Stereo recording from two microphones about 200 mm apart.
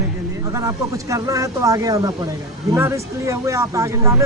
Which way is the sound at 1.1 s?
15° right (ahead or behind).